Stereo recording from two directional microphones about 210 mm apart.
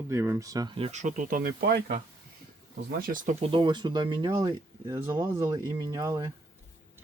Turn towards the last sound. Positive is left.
turn(degrees=-15)  # may be behind; listen again after turning